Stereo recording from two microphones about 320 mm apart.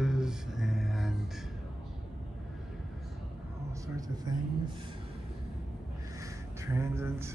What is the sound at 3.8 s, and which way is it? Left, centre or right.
Speech, centre.